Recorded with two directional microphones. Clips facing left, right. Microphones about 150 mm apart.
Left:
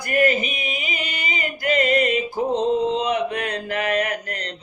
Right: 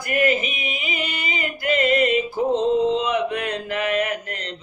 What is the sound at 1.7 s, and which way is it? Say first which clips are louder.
Music: even; 40° left (ahead or behind).